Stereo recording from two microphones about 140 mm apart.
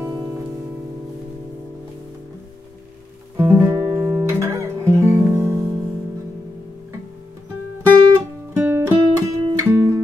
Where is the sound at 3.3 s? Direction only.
15° right (ahead or behind).